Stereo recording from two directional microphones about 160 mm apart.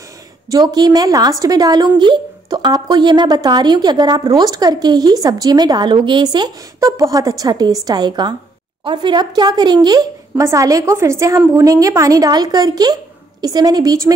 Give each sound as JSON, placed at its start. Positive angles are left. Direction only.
{"t": 0.5, "sound": "speech", "side_deg": -25}